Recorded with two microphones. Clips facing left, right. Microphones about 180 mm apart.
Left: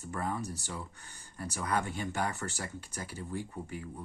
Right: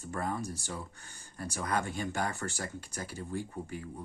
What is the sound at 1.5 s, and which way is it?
Speech, 45° right (ahead or behind).